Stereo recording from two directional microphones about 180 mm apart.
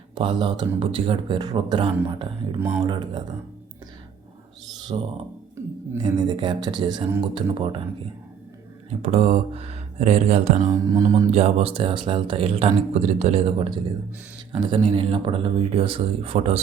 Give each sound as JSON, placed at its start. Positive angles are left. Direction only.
{"t": 0.2, "sound": "speech", "side_deg": -25}
{"t": 2.6, "sound": "speech", "side_deg": -10}
{"t": 2.8, "sound": "speech", "side_deg": -25}
{"t": 4.9, "sound": "speech", "side_deg": -30}
{"t": 8.9, "sound": "speech", "side_deg": -35}
{"t": 10.7, "sound": "speech", "side_deg": -20}
{"t": 11.3, "sound": "speech", "side_deg": -35}